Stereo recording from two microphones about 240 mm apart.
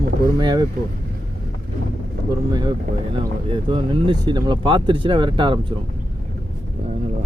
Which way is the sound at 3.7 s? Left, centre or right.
Centre.